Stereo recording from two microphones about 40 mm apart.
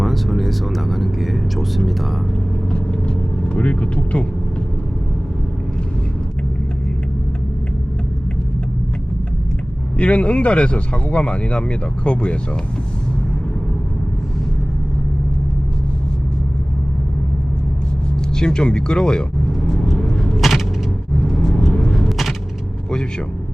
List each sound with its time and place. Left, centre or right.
0.0 s speech: centre
2.7 s vehicle: left
10.0 s speech: left
18.3 s speech: centre
19.8 s vehicle: centre
20.3 s a sound: centre
21.5 s vehicle: centre